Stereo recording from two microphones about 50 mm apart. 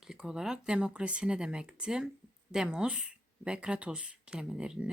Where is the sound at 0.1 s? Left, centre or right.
Centre.